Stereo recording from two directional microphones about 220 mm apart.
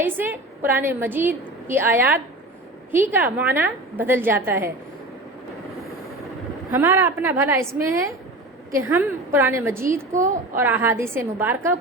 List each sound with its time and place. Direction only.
0.0 s a woman's voice: 10° right (ahead or behind)
6.7 s a woman's voice: 10° right (ahead or behind)
10.1 s a woman's voice: 35° right (ahead or behind)
10.6 s a woman's voice: 10° right (ahead or behind)